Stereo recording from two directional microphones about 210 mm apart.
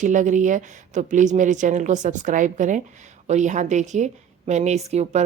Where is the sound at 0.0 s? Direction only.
35° right (ahead or behind).